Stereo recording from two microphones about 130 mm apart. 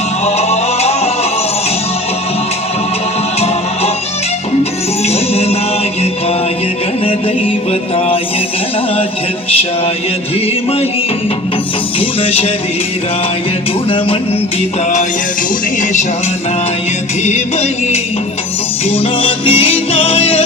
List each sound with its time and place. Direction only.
0.3 s music: 55° left (ahead or behind)
5.0 s music: 55° left (ahead or behind)
7.0 s music: 45° left (ahead or behind)
11.9 s music: 50° left (ahead or behind)
17.2 s music: 55° left (ahead or behind)
18.9 s music: 45° left (ahead or behind)